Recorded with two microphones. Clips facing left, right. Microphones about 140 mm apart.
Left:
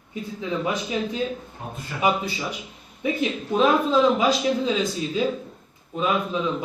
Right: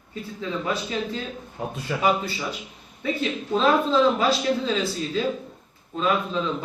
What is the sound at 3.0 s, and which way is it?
A man's voice, 15° left (ahead or behind).